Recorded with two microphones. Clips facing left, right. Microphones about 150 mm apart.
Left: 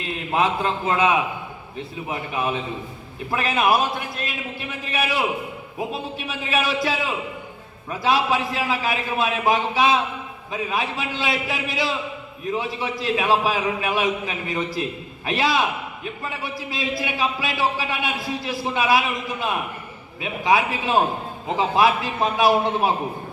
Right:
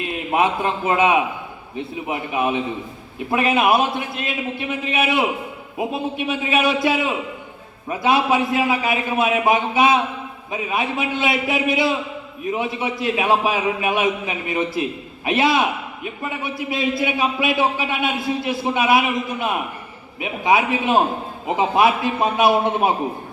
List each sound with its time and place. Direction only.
0.3 s a man's voice: 20° right (ahead or behind)
4.9 s a man's voice: 20° right (ahead or behind)